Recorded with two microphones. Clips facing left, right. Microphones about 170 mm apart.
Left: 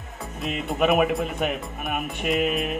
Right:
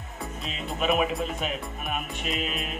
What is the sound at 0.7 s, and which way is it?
A man's voice, 60° left (ahead or behind).